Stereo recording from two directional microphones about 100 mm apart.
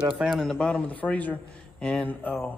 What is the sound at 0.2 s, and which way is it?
A man's voice, centre (ahead or behind).